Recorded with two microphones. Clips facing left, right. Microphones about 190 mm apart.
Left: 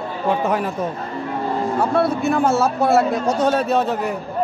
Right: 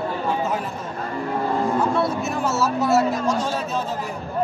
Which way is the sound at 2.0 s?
60° left (ahead or behind).